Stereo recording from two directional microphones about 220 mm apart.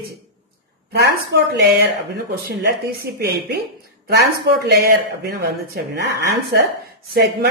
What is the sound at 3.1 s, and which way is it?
Speech, 45° right (ahead or behind).